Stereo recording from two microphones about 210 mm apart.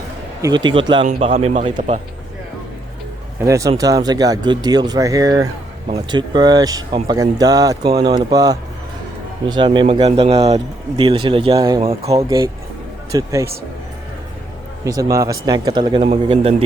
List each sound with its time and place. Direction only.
0.4 s a man's voice: 20° right (ahead or behind)
3.4 s speech: 15° right (ahead or behind)
12.1 s speech: 15° right (ahead or behind)
14.8 s speech: 15° right (ahead or behind)